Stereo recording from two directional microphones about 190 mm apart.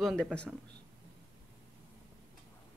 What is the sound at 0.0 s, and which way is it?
Speech, centre (ahead or behind).